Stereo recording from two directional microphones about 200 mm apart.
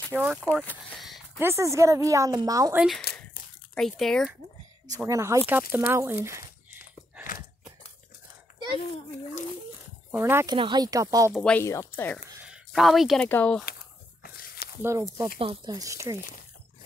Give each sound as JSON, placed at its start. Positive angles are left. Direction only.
{"t": 0.1, "sound": "speech", "side_deg": -5}
{"t": 1.4, "sound": "speech", "side_deg": -15}
{"t": 3.1, "sound": "crumpling", "side_deg": 50}
{"t": 3.7, "sound": "speech", "side_deg": 0}
{"t": 4.8, "sound": "speech", "side_deg": -15}
{"t": 5.5, "sound": "a sound", "side_deg": -10}
{"t": 10.1, "sound": "speech", "side_deg": -10}
{"t": 10.5, "sound": "speech", "side_deg": -25}
{"t": 11.3, "sound": "speech", "side_deg": 5}
{"t": 12.4, "sound": "speech", "side_deg": -5}
{"t": 14.2, "sound": "snake", "side_deg": 50}
{"t": 14.8, "sound": "speech", "side_deg": -15}
{"t": 15.3, "sound": "speech", "side_deg": -25}